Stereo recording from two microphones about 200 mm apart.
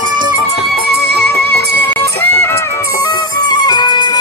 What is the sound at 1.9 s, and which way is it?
Music, 10° left (ahead or behind).